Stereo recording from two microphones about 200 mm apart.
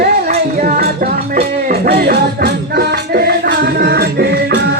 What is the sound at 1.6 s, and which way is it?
Music, 50° right (ahead or behind).